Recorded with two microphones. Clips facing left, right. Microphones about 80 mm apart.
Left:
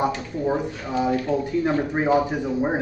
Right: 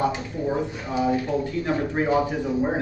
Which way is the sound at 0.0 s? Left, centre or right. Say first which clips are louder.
Left 1 dB; left.